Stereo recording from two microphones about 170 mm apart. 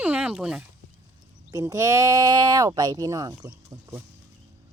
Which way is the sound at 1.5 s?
20° right (ahead or behind).